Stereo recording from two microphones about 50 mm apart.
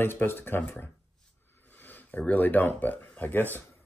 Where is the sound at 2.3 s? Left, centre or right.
Left.